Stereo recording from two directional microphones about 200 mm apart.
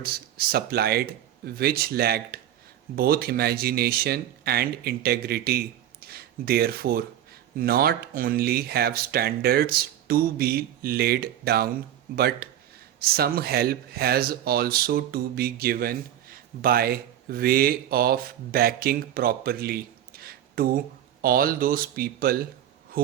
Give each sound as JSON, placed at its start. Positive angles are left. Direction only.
{"t": 0.0, "sound": "speech", "side_deg": -50}